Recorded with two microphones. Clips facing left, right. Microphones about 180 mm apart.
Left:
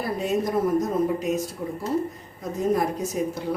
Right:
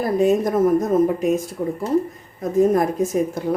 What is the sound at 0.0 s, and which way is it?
A woman's voice, 45° right (ahead or behind).